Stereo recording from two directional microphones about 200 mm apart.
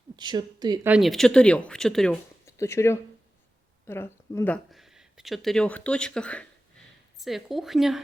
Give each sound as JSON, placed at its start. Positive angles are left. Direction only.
{"t": 0.2, "sound": "a woman's voice", "side_deg": -20}
{"t": 0.9, "sound": "speech", "side_deg": 0}
{"t": 2.5, "sound": "speech", "side_deg": 15}